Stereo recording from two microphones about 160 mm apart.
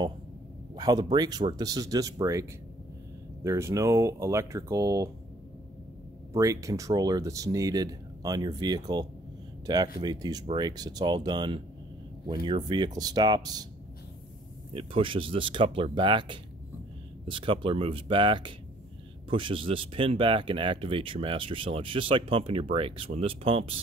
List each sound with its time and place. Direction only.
0.7 s a sound: 25° right (ahead or behind)
1.1 s speech: 25° right (ahead or behind)
3.4 s speech: 20° right (ahead or behind)
6.3 s speech: 20° right (ahead or behind)
14.7 s speech: 35° right (ahead or behind)